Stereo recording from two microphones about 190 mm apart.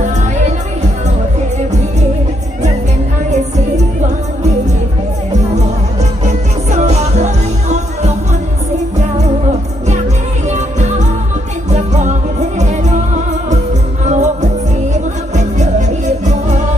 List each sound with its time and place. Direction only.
3.3 s music: 35° right (ahead or behind)
6.2 s music: 35° right (ahead or behind)
10.5 s music: 35° right (ahead or behind)
14.0 s music: 40° right (ahead or behind)